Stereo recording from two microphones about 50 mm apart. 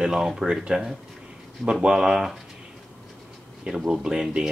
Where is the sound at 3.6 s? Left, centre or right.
Centre.